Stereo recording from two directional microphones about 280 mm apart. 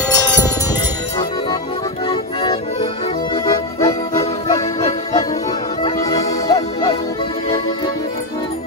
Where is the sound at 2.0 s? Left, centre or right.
Centre.